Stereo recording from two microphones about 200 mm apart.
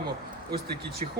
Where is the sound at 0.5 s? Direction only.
50° right (ahead or behind).